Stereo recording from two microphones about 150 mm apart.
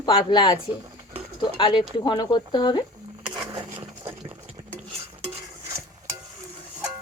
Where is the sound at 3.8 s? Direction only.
35° right (ahead or behind).